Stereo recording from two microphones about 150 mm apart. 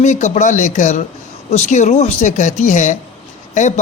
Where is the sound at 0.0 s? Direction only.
50° left (ahead or behind).